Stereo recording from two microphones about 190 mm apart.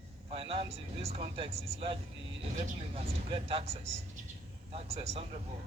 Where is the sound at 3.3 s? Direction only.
30° right (ahead or behind).